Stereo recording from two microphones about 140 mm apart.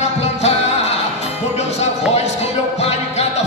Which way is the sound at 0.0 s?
50° left (ahead or behind).